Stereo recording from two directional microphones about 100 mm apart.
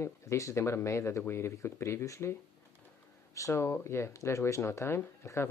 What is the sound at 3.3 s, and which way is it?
Speech, 30° left (ahead or behind).